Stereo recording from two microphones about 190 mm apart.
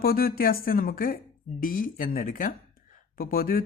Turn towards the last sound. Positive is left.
turn(degrees=50)  # may be behind; listen again after turning